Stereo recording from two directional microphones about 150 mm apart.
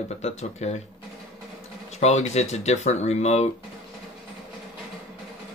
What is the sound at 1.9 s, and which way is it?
Speech, 50° left (ahead or behind).